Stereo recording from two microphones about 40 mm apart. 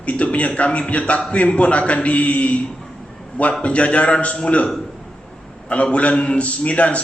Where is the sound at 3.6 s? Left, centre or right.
Left.